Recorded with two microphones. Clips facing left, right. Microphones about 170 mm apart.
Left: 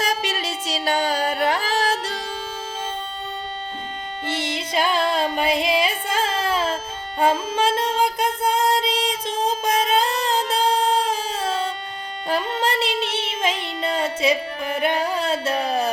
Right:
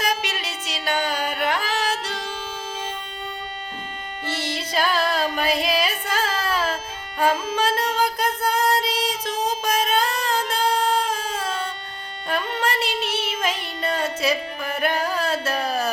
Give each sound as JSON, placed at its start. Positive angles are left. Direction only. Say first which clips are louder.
{"t": 0.0, "sound": "music", "louder": "left 2 dB", "side_deg": 40}
{"t": 4.3, "sound": "music", "louder": "left 2 dB", "side_deg": 20}
{"t": 12.3, "sound": "child singing", "louder": "left 2 dB", "side_deg": 30}